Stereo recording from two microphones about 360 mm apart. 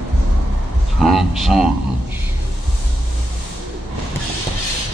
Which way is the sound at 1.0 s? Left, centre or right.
Centre.